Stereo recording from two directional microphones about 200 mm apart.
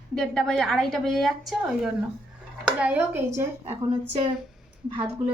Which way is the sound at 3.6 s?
30° right (ahead or behind).